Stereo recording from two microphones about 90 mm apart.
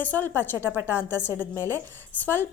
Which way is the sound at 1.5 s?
30° right (ahead or behind).